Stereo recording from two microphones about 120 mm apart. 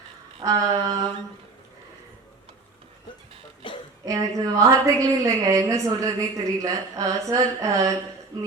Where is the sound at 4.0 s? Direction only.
25° right (ahead or behind).